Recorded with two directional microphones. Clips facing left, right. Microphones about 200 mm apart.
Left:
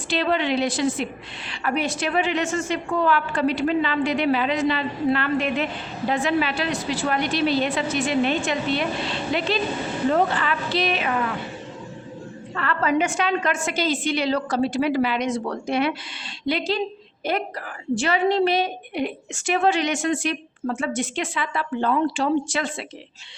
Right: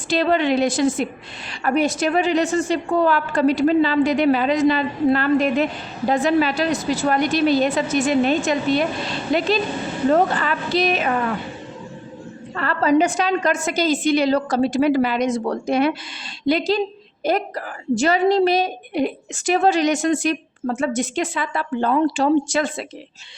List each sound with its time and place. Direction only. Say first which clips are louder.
0.1 s a woman's voice: right 4 dB; 45° right (ahead or behind)
12.5 s a woman's voice: right 5 dB; 40° right (ahead or behind)